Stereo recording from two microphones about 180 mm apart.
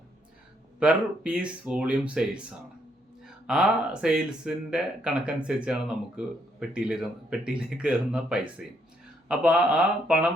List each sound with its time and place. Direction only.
0.8 s speech: 5° right (ahead or behind)
3.4 s speech: 5° right (ahead or behind)